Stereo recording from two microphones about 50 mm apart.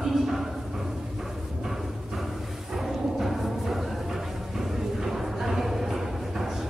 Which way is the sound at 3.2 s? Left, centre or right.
Centre.